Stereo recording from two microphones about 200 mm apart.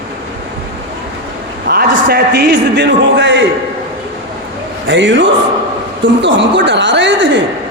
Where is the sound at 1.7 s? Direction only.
50° right (ahead or behind).